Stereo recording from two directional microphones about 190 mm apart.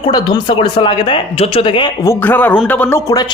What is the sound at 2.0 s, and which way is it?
Speech, 10° left (ahead or behind).